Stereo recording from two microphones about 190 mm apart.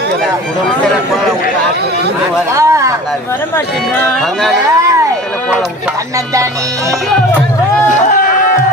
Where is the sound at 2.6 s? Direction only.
15° right (ahead or behind).